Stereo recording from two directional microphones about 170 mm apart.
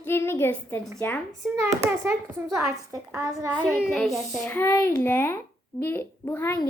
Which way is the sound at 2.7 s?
15° right (ahead or behind).